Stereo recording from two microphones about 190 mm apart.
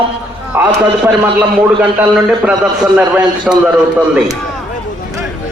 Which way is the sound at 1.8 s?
5° right (ahead or behind).